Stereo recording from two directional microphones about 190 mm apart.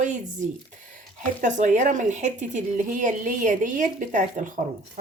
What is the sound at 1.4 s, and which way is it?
Speech, 40° right (ahead or behind).